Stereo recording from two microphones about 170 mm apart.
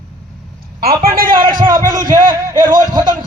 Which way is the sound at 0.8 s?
60° right (ahead or behind).